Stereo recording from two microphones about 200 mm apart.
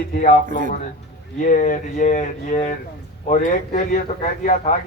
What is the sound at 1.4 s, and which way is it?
Speech, 40° left (ahead or behind).